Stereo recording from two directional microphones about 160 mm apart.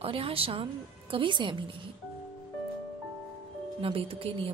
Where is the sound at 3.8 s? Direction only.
35° right (ahead or behind).